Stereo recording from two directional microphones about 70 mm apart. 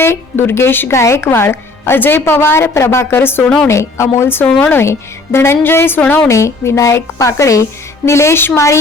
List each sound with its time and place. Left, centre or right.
0.0 s a woman's voice: left
3.7 s a woman's voice: left
6.3 s a woman's voice: left